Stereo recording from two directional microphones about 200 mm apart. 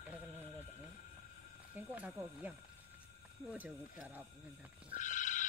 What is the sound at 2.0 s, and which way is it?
Speech, 10° right (ahead or behind).